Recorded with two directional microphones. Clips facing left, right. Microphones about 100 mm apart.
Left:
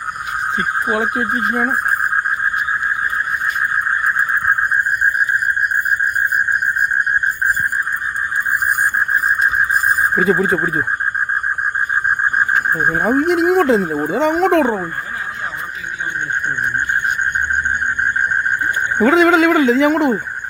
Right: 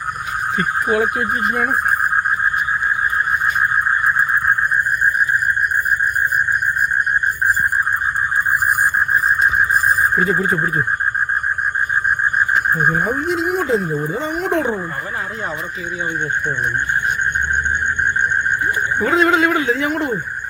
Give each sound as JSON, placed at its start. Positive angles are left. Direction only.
{"t": 0.5, "sound": "speech", "side_deg": 25}
{"t": 9.6, "sound": "neigh", "side_deg": 0}
{"t": 13.0, "sound": "speech", "side_deg": 65}
{"t": 18.9, "sound": "speech", "side_deg": 90}